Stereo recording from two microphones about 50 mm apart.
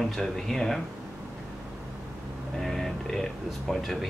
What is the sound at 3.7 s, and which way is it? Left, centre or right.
Speech, centre.